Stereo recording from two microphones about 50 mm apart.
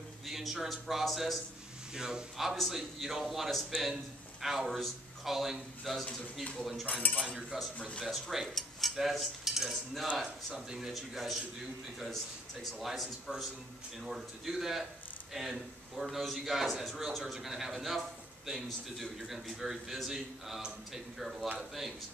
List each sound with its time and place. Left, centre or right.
0.3 s a man's voice: centre
2.0 s speech: centre
2.3 s a man's voice: centre
6.9 s cutlery: left
7.5 s a man's voice: centre
12.8 s a man's voice: centre